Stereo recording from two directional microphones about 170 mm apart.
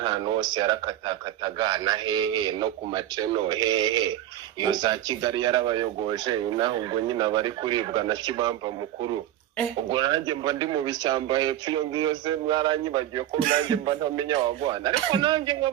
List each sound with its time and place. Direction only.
0.0 s speech: 25° right (ahead or behind)